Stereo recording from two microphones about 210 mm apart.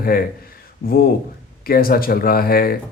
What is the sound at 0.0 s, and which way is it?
Speech, 45° left (ahead or behind).